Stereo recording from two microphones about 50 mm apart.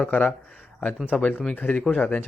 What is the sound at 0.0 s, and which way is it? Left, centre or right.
A man's voice, left.